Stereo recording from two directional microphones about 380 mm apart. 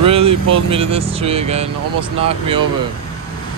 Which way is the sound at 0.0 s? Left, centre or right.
Centre.